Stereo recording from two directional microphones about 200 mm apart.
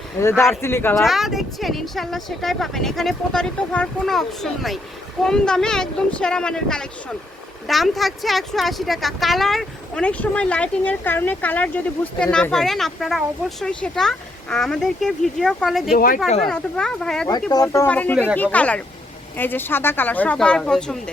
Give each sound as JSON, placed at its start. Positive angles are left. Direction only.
{"t": 0.2, "sound": "speech", "side_deg": 15}
{"t": 1.0, "sound": "speech", "side_deg": 0}
{"t": 16.0, "sound": "speech", "side_deg": 45}
{"t": 16.5, "sound": "speech", "side_deg": 5}
{"t": 17.5, "sound": "speech", "side_deg": 15}